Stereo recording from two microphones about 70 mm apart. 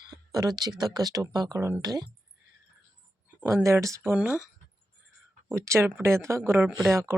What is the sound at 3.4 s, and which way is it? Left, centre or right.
Speech, right.